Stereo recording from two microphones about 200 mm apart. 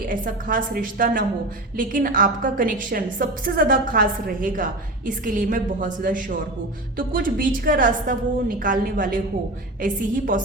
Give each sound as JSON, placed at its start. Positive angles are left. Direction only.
{"t": 0.1, "sound": "a woman's voice", "side_deg": -40}